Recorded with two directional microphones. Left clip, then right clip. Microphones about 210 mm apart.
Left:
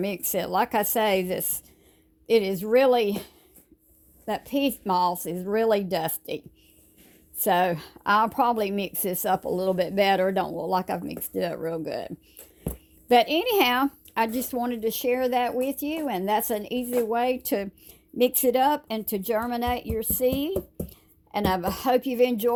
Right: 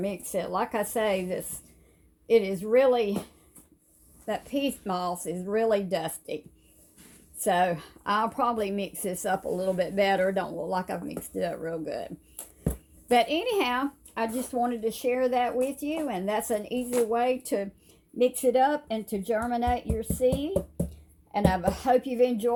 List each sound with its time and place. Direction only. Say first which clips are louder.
0.0 s speech: left 2 dB; 55° left (ahead or behind)